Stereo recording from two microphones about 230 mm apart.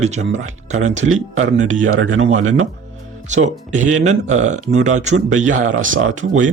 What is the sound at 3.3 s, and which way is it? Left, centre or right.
Speech, right.